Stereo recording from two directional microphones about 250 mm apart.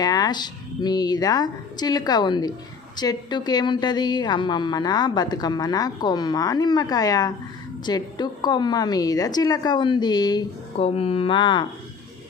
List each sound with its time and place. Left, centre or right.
0.0 s a woman's voice: centre